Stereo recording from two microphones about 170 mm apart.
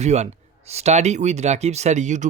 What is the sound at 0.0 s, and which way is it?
Speech, 40° right (ahead or behind).